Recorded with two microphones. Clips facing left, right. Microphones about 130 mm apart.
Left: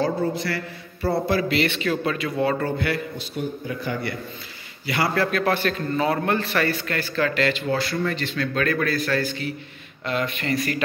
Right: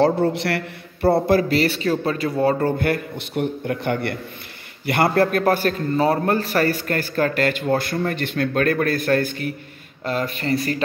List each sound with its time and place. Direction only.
0.0 s a man's voice: 70° right (ahead or behind)
1.2 s a man's voice: 45° right (ahead or behind)
10.0 s speech: 40° right (ahead or behind)